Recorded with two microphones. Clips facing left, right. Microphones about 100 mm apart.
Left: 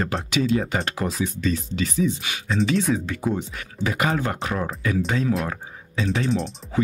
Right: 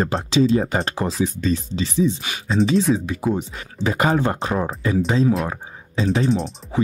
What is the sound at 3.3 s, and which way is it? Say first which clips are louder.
Speech: right 2 dB; 25° right (ahead or behind).